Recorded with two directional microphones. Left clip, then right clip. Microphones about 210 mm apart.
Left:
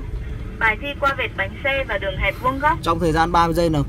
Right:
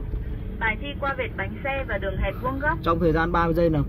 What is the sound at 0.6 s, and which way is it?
Speech, 50° left (ahead or behind).